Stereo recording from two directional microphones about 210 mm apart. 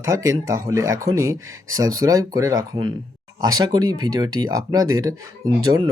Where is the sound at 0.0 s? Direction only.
15° right (ahead or behind).